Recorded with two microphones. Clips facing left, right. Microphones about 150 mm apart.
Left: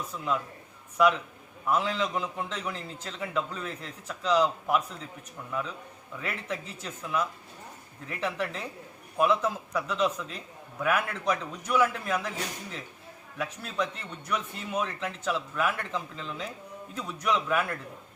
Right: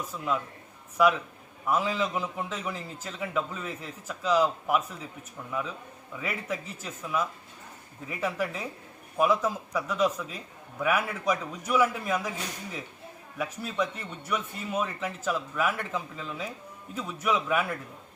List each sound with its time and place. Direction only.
0.1 s a man's voice: 5° right (ahead or behind)
13.4 s a man's voice: 5° right (ahead or behind)